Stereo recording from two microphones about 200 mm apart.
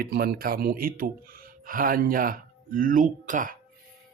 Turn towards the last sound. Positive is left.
turn(degrees=-40)  # may be behind; listen again after turning